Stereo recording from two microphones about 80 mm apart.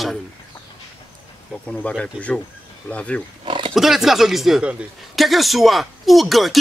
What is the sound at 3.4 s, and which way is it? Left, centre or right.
Pig, right.